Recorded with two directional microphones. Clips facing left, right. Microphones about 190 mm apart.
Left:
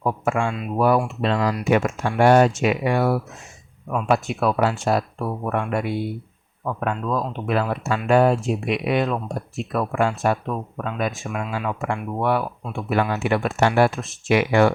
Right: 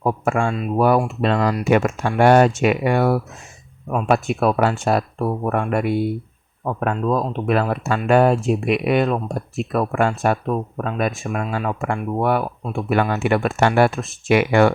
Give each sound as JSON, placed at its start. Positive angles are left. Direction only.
{"t": 0.0, "sound": "speech", "side_deg": -40}
{"t": 0.8, "sound": "speech", "side_deg": -60}
{"t": 6.7, "sound": "speech", "side_deg": -45}